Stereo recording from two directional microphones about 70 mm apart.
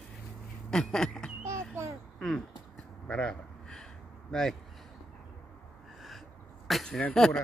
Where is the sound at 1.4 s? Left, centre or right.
Right.